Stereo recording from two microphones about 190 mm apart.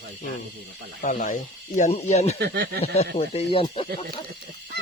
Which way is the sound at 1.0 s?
45° left (ahead or behind).